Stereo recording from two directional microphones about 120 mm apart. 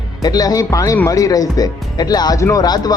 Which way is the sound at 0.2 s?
35° left (ahead or behind).